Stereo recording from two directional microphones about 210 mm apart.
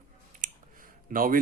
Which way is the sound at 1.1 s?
40° right (ahead or behind).